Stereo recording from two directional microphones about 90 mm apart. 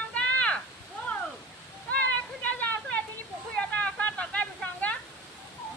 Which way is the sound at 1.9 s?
15° left (ahead or behind).